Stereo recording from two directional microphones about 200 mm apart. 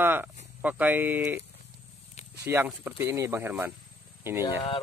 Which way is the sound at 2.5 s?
10° right (ahead or behind).